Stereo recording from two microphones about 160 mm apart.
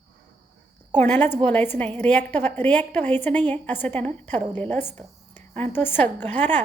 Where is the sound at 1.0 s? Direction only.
10° left (ahead or behind).